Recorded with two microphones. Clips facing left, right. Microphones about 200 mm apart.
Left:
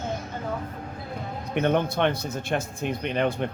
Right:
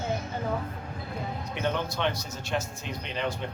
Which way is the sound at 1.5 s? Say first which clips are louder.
Left 8 dB; 55° left (ahead or behind).